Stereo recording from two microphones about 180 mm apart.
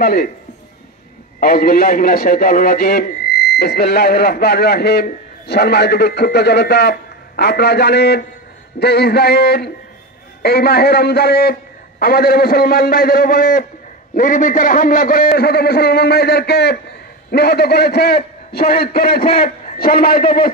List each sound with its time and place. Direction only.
0.0 s a man's voice: 55° left (ahead or behind)
1.4 s a man's voice: 55° left (ahead or behind)